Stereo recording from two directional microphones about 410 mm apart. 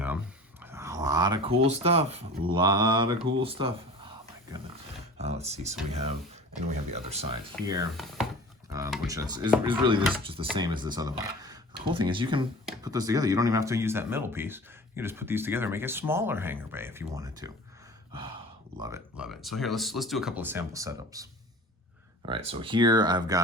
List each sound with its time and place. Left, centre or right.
0.6 s speech: centre
5.1 s speech: centre
6.9 s speech: centre
7.7 s speech: centre
18.8 s speech: centre
22.3 s speech: centre